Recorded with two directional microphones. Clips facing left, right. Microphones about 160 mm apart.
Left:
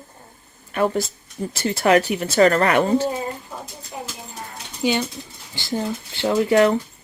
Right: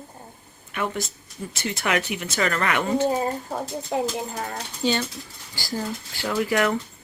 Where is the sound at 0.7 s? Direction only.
35° left (ahead or behind).